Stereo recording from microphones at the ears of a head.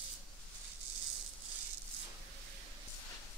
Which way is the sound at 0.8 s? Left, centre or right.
Right.